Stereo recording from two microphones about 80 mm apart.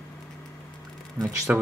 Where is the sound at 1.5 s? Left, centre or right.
Centre.